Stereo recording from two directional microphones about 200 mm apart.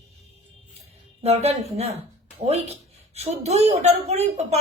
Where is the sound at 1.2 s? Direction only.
30° right (ahead or behind).